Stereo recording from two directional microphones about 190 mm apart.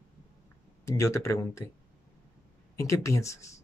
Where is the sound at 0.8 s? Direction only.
15° left (ahead or behind).